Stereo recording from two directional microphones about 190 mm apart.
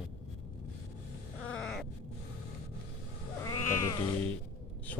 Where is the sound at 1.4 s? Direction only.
5° left (ahead or behind).